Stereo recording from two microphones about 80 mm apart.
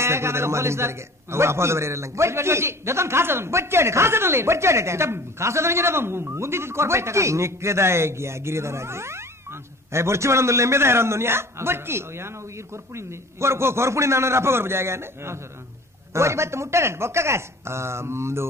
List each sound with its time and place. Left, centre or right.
0.0 s a man's voice: right